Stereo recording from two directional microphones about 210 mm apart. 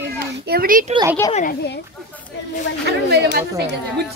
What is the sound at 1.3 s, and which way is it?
Speech, 40° left (ahead or behind).